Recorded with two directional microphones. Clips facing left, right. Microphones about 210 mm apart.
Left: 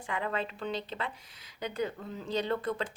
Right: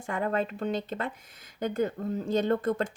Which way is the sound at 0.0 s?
45° right (ahead or behind).